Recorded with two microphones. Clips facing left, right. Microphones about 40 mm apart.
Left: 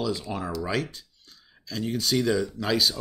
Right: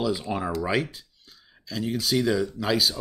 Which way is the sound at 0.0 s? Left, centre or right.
Centre.